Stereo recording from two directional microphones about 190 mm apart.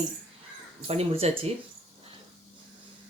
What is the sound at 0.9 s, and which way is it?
Speech, 30° right (ahead or behind).